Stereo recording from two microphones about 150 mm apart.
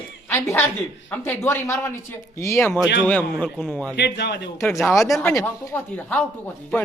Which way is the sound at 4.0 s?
90° left.